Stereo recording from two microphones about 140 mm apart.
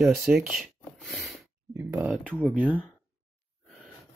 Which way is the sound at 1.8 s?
15° right (ahead or behind).